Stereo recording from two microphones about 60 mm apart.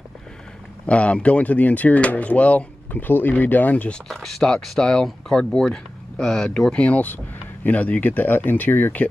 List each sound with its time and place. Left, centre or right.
0.8 s speech: centre
2.9 s speech: left
4.1 s speech: centre; by 9.0 s left